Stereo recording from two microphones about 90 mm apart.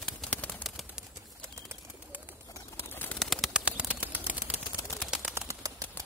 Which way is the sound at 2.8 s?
20° left (ahead or behind).